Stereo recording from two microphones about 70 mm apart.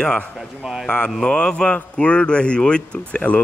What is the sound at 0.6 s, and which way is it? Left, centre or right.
Speech, centre.